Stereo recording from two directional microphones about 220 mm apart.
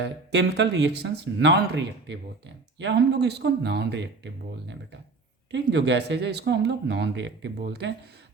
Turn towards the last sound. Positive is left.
turn(degrees=-50)  # may be behind; listen again after turning